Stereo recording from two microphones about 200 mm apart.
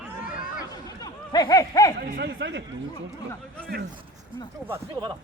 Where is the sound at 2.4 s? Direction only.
65° right (ahead or behind).